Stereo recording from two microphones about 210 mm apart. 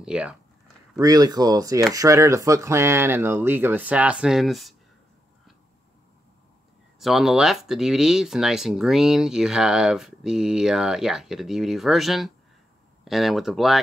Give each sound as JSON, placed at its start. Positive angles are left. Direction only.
{"t": 0.0, "sound": "speech", "side_deg": -5}
{"t": 0.9, "sound": "speech", "side_deg": -15}
{"t": 7.0, "sound": "speech", "side_deg": 0}